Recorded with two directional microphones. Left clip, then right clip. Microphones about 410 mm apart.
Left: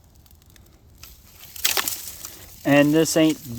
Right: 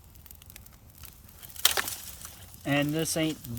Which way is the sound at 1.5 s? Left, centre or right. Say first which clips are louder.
Left 3 dB; left.